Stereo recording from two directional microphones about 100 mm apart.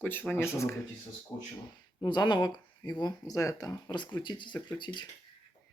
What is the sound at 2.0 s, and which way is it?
Speech, 50° left (ahead or behind).